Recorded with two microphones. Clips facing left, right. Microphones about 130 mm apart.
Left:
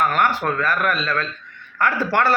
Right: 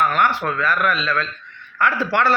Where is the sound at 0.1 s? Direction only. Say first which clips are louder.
Even; 45° left (ahead or behind).